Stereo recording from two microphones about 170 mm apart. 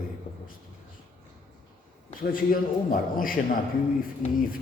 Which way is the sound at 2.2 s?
55° left (ahead or behind).